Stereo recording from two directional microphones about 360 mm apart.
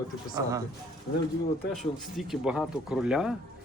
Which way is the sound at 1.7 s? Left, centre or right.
Centre.